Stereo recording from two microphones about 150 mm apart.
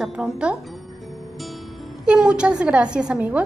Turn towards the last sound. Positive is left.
turn(degrees=-10)  # may be behind; listen again after turning